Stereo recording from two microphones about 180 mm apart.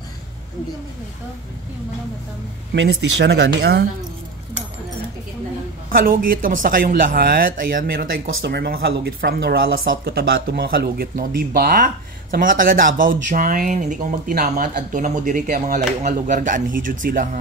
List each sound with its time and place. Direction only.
2.7 s speech: 85° right; by 3.8 s 70° right (ahead or behind)
5.9 s speech: 55° right (ahead or behind)